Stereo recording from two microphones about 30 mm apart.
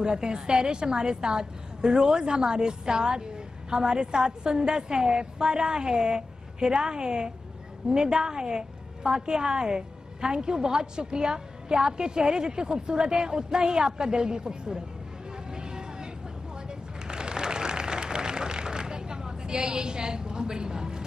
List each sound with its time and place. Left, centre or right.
0.0 s a woman's voice: right
15.3 s vehicle: right
16.6 s a sound: right